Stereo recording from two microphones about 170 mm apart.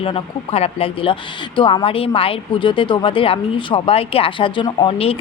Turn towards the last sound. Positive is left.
turn(degrees=35)  # may be behind; listen again after turning